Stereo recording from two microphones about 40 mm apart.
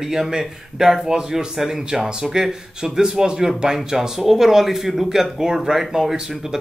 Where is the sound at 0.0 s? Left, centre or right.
Centre.